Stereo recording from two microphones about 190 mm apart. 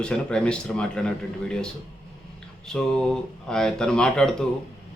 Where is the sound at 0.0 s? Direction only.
5° left (ahead or behind).